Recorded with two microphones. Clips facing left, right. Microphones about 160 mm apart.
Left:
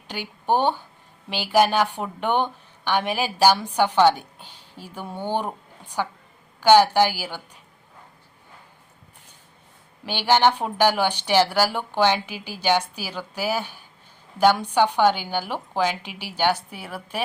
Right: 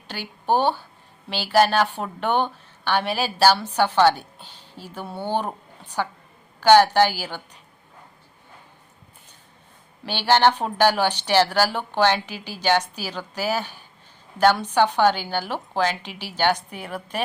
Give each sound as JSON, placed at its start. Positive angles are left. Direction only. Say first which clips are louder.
{"t": 0.1, "sound": "a woman's voice", "louder": "even", "side_deg": 15}
{"t": 5.5, "sound": "a sound", "louder": "even", "side_deg": 10}
{"t": 6.6, "sound": "a woman's voice", "louder": "right 1 dB", "side_deg": 10}
{"t": 10.1, "sound": "a woman's voice", "louder": "right 1 dB", "side_deg": 15}